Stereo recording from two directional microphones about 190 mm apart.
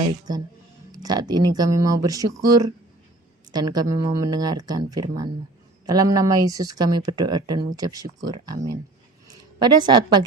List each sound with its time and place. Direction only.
0.9 s speech: 20° right (ahead or behind)
9.6 s speech: 25° right (ahead or behind)